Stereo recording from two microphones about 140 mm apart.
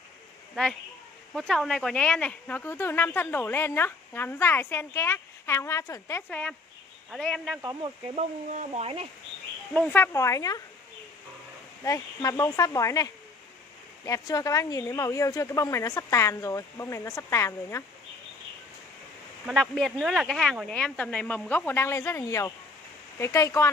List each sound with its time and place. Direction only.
1.3 s speech: centre (ahead or behind)
7.1 s speech: 5° left (ahead or behind)
8.2 s speech: 55° right (ahead or behind)
9.8 s speech: 15° left (ahead or behind)
11.8 s speech: 25° left (ahead or behind)
19.4 s speech: 5° left (ahead or behind); by 23.7 s 20° left (ahead or behind)